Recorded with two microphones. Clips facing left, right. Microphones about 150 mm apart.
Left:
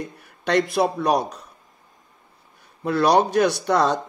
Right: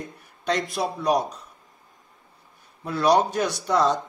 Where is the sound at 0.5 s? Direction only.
65° left (ahead or behind).